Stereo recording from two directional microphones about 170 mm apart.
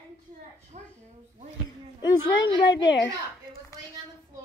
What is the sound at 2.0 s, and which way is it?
A woman's voice, 25° left (ahead or behind).